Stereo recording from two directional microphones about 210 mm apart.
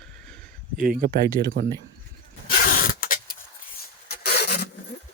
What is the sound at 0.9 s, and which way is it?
Speech, 45° right (ahead or behind).